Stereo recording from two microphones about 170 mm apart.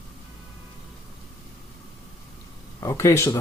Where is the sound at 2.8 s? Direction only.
15° left (ahead or behind).